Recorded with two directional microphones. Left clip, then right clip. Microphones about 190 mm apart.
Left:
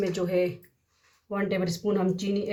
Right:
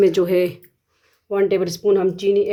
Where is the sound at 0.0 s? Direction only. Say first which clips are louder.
Right 10 dB; 60° right (ahead or behind).